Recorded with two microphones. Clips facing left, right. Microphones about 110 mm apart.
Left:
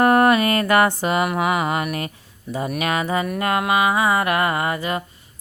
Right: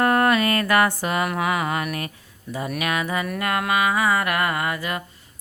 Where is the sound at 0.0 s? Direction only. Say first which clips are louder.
Left 4 dB; 20° left (ahead or behind).